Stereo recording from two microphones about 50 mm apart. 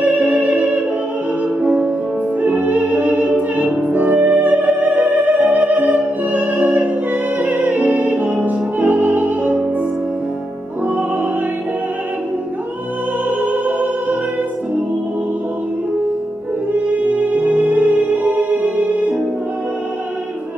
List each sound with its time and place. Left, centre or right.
0.0 s music: right
8.2 s music: centre
8.5 s music: right
13.4 s music: right
16.7 s music: right